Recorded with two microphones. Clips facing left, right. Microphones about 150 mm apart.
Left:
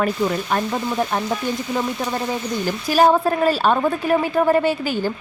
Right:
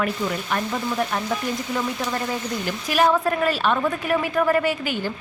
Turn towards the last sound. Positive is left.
turn(degrees=35)  # may be behind; listen again after turning